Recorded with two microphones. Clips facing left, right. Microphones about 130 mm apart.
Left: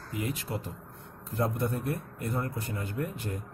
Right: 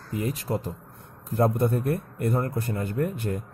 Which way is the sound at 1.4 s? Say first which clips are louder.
Right 7 dB; 55° right (ahead or behind).